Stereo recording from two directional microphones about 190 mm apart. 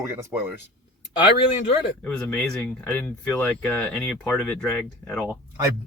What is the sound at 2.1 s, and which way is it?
Speech, 5° left (ahead or behind).